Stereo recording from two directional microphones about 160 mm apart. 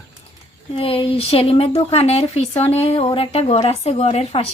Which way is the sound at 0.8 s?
35° left (ahead or behind).